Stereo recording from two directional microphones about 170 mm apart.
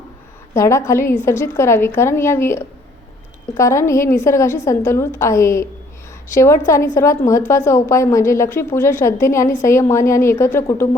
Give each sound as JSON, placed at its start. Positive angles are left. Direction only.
{"t": 0.5, "sound": "a woman's voice", "side_deg": 15}